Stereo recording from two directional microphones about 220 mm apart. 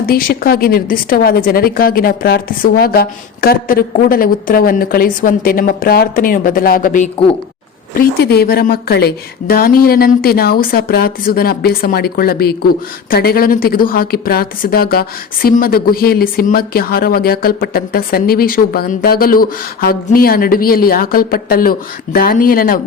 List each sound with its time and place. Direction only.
0.0 s a woman's voice: 40° left (ahead or behind)
7.9 s a woman's voice: 45° left (ahead or behind)